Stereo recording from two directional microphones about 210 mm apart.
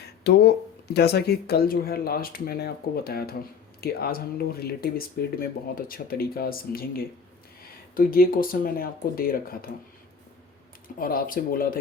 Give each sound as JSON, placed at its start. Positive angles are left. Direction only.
{"t": 0.3, "sound": "speech", "side_deg": 50}
{"t": 11.0, "sound": "speech", "side_deg": 40}